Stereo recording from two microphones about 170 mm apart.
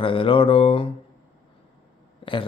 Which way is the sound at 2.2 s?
30° left (ahead or behind).